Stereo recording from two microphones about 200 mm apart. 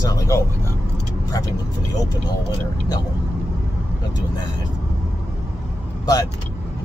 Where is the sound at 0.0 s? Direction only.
15° left (ahead or behind).